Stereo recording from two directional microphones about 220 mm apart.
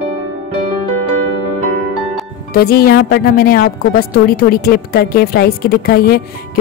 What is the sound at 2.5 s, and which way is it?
Speech, 45° left (ahead or behind).